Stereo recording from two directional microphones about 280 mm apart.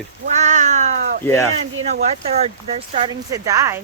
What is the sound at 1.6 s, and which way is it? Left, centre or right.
Speech, right.